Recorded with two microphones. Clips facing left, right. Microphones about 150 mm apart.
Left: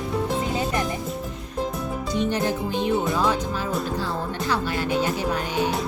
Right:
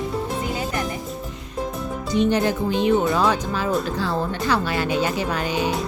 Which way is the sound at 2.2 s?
90° right.